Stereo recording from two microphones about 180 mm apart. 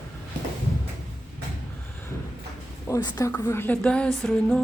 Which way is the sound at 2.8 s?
20° left (ahead or behind).